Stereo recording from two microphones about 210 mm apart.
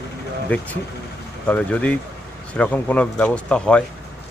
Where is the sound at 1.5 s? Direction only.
5° left (ahead or behind).